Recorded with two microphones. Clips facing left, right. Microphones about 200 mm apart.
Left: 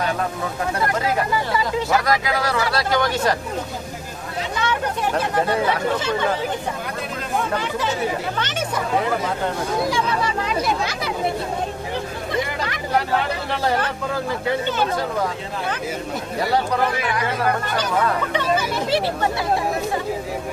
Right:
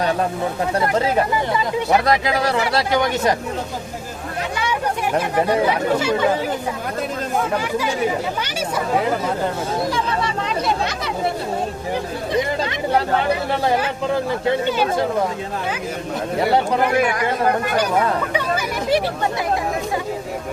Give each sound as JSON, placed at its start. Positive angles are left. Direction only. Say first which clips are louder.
{"t": 0.8, "sound": "speech", "louder": "right 4 dB", "side_deg": -25}
{"t": 4.6, "sound": "speech", "louder": "even", "side_deg": -10}
{"t": 7.5, "sound": "speech", "louder": "right 2 dB", "side_deg": -10}
{"t": 10.4, "sound": "speech", "louder": "right 1 dB", "side_deg": 0}
{"t": 12.3, "sound": "speech", "louder": "right 4 dB", "side_deg": -20}
{"t": 18.3, "sound": "speech", "louder": "left 1 dB", "side_deg": -10}